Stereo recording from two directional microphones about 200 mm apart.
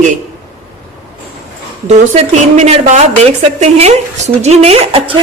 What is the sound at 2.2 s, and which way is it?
A woman's voice, 35° right (ahead or behind).